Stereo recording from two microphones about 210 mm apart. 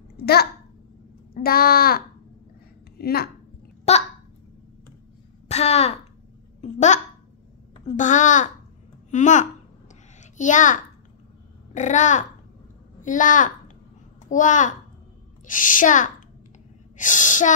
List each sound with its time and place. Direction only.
0.2 s a woman's voice: 50° left (ahead or behind)
3.9 s a woman's voice: 30° left (ahead or behind)
5.5 s a woman's voice: 30° left (ahead or behind)